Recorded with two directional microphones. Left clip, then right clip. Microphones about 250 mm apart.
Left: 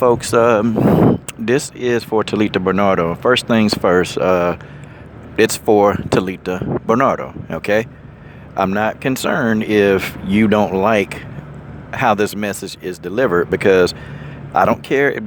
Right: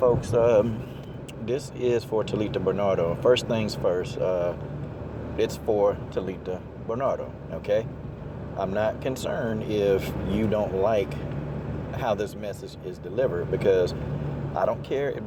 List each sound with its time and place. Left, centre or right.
0.0 s a man's voice: left